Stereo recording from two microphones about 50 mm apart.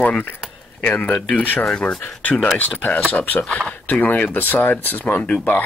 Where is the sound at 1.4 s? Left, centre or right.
Left.